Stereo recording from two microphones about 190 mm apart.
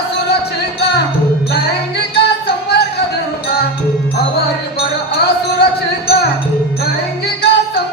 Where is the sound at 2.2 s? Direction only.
60° left (ahead or behind).